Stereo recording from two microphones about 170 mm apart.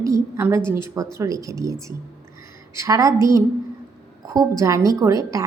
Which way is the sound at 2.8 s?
20° right (ahead or behind).